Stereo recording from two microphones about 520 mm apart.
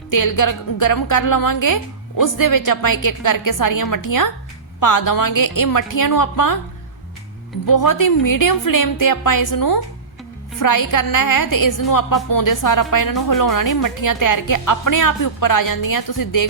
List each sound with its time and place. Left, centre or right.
0.1 s a woman's voice: left
7.7 s a woman's voice: left